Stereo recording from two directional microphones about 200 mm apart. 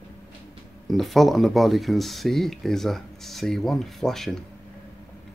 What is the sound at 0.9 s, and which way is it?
Speech, centre (ahead or behind).